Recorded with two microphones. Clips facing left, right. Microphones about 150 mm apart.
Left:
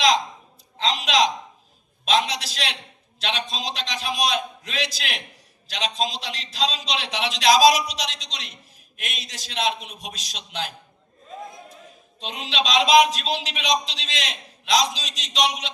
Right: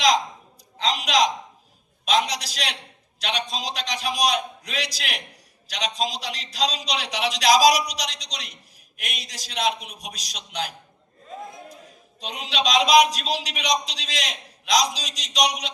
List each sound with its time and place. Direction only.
0.8 s a man's voice: 25° left (ahead or behind)
12.2 s a man's voice: 25° left (ahead or behind)